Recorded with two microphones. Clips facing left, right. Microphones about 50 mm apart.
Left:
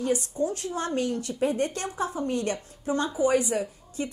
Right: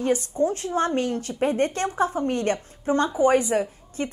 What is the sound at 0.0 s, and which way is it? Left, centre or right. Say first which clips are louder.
A woman's voice: right 4 dB; right.